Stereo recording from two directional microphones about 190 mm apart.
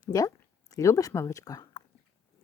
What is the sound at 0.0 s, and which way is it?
A woman's voice, 20° left (ahead or behind).